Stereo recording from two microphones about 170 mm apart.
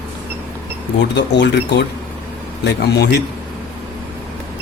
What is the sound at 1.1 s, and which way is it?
Speech, 90° left.